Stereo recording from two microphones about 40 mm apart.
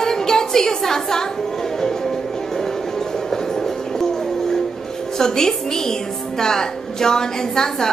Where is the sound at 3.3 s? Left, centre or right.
Centre.